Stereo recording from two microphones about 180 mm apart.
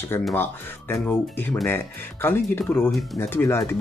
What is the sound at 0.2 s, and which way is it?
Speech, 10° left (ahead or behind).